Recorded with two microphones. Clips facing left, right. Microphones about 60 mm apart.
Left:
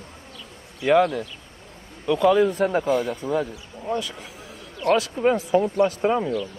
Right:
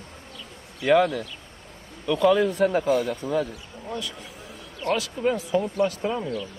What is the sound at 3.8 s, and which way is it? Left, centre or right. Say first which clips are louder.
Speech: left 6 dB; left.